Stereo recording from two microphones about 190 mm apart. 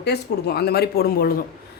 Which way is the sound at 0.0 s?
60° left (ahead or behind).